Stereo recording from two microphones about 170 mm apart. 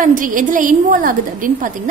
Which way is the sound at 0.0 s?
50° right (ahead or behind).